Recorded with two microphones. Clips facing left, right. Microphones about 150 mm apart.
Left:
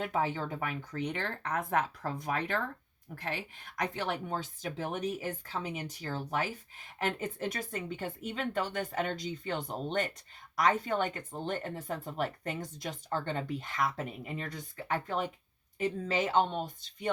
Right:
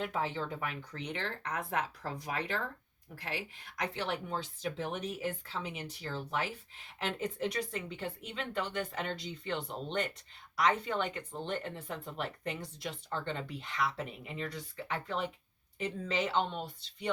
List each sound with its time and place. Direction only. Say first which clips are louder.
0.0 s speech: left 3 dB; 45° left (ahead or behind)